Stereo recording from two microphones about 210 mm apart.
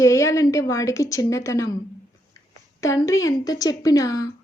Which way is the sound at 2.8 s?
15° left (ahead or behind).